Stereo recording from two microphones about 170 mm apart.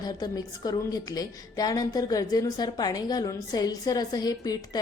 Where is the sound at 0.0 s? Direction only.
25° left (ahead or behind).